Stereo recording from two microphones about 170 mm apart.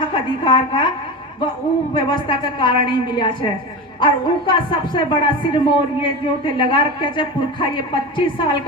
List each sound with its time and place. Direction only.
0.0 s a woman's voice: 30° left (ahead or behind)
2.0 s a woman's voice: 25° left (ahead or behind)